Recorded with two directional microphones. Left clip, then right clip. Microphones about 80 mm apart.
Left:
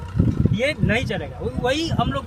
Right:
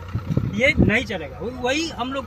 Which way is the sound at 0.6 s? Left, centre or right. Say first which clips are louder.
Right 4 dB; left.